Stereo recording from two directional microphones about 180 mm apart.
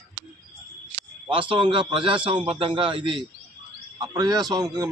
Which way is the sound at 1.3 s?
30° right (ahead or behind).